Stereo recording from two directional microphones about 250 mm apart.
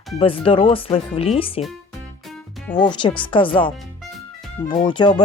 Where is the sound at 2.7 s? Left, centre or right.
Centre.